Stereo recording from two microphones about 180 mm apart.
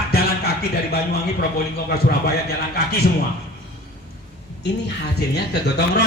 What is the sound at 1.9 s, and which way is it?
Music, 60° left (ahead or behind).